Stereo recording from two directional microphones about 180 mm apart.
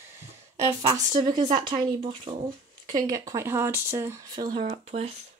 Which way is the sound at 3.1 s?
20° right (ahead or behind).